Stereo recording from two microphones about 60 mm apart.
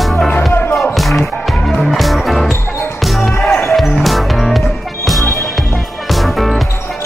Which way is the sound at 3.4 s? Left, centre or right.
Left.